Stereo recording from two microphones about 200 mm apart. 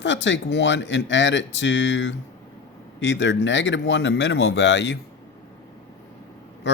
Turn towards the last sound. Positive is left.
turn(degrees=65)  # may be behind; listen again after turning